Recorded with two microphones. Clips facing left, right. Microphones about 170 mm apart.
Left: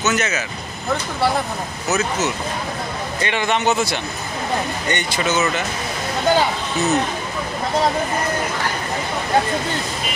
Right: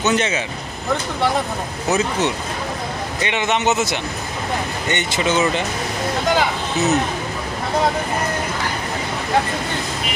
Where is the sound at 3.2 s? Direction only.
20° right (ahead or behind).